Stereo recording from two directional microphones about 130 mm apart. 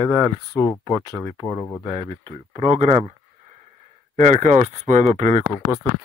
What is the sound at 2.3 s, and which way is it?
Speech, 55° right (ahead or behind).